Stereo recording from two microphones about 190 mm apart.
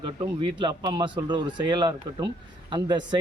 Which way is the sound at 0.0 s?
25° right (ahead or behind).